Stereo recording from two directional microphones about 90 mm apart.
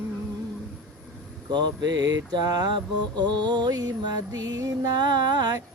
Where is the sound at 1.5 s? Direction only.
55° right (ahead or behind).